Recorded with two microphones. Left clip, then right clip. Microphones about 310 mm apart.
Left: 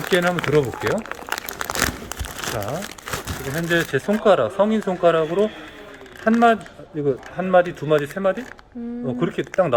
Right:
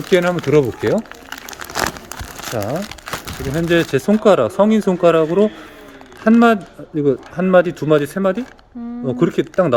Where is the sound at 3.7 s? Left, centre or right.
Right.